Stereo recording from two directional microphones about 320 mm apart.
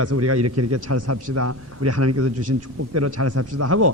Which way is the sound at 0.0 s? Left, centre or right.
Right.